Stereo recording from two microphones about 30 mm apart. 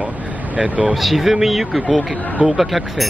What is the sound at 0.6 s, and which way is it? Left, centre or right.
Speech, right.